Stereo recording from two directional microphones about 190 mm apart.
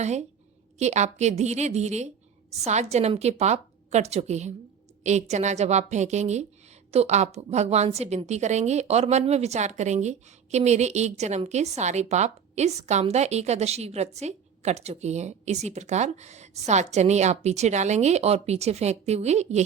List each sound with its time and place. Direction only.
0.0 s a woman's voice: 35° right (ahead or behind)